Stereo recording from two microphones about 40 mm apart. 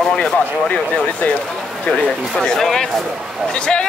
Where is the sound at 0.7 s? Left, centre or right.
Left.